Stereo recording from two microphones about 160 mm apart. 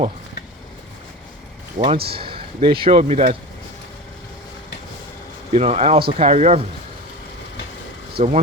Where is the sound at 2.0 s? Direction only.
35° right (ahead or behind).